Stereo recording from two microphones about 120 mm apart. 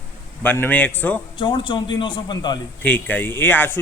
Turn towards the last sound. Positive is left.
turn(degrees=20)  # may be behind; listen again after turning